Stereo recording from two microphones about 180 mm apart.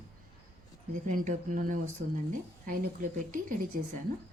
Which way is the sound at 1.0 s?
45° right (ahead or behind).